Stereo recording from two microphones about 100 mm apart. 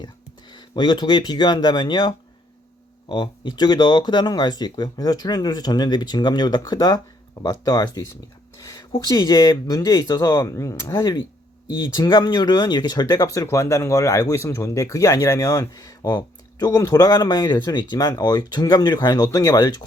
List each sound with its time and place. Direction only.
0.5 s speech: 50° left (ahead or behind)
8.5 s a sound: 40° left (ahead or behind)
9.0 s speech: 40° left (ahead or behind)